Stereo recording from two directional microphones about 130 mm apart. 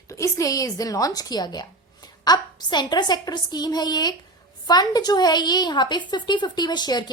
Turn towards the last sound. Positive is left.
turn(degrees=35)  # may be behind; listen again after turning